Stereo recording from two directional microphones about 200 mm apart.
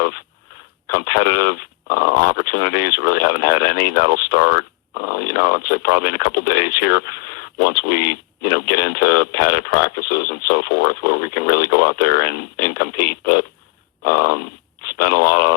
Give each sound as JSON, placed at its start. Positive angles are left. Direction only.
{"t": 0.9, "sound": "speech", "side_deg": 50}